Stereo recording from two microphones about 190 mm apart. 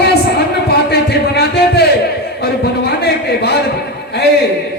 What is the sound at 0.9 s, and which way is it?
A woman's voice, 55° left (ahead or behind).